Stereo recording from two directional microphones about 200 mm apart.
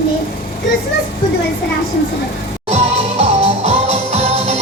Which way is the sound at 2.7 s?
30° right (ahead or behind).